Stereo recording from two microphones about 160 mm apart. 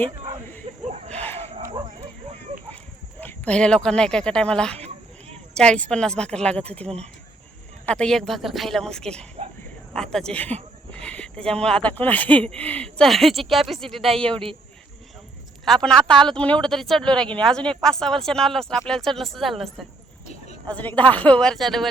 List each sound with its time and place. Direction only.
0.9 s a sound: 45° right (ahead or behind)
1.2 s livestock: 15° left (ahead or behind)
3.2 s speech: 10° left (ahead or behind)
7.9 s speech: 5° left (ahead or behind)
15.6 s speech: 5° left (ahead or behind)
20.2 s a sound: 45° left (ahead or behind)
20.7 s speech: 10° left (ahead or behind)